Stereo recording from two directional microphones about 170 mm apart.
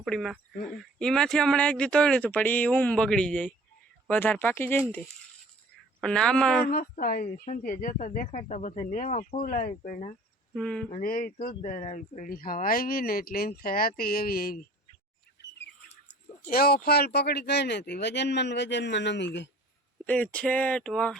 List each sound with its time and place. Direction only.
0.0 s speech: centre (ahead or behind)
6.0 s speech: 5° left (ahead or behind)
6.7 s speech: 55° left (ahead or behind)
10.5 s speech: 5° left (ahead or behind)
10.9 s speech: 55° left (ahead or behind)
16.5 s speech: 65° left (ahead or behind); by 19.5 s 90° left
20.1 s speech: 10° left (ahead or behind)